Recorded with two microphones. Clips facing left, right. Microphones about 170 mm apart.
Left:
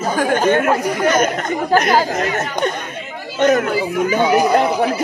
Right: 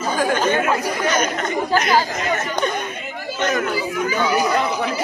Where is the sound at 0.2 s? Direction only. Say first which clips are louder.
Left 4 dB; 55° left (ahead or behind).